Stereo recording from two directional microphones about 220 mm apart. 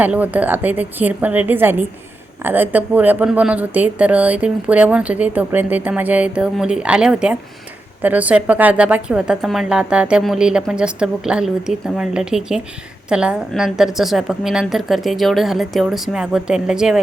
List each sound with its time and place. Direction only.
0.0 s a woman's voice: 5° right (ahead or behind)